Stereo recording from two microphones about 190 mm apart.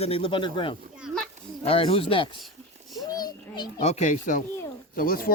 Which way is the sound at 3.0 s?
20° left (ahead or behind).